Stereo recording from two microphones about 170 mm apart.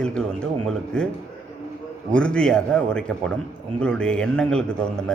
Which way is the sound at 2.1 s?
5° left (ahead or behind).